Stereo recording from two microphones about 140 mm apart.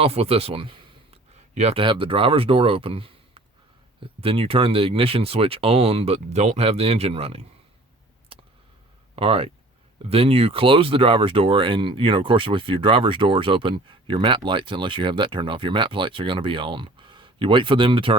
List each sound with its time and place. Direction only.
0.0 s a man's voice: 45° right (ahead or behind)
8.3 s a sound: 40° right (ahead or behind)
9.1 s speech: 40° right (ahead or behind)